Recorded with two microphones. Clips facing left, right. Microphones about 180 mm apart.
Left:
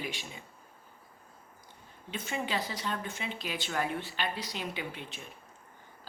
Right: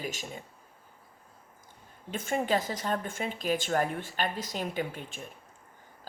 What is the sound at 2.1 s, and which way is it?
Speech, 50° right (ahead or behind).